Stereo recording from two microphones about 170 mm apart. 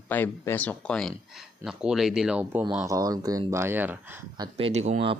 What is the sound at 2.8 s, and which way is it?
Speech, 20° right (ahead or behind).